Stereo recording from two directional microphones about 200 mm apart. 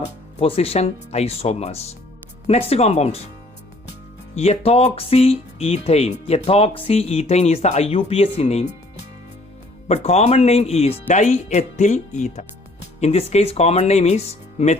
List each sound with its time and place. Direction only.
0.0 s speech: 30° left (ahead or behind)
4.4 s speech: 30° left (ahead or behind)
9.9 s speech: 30° left (ahead or behind)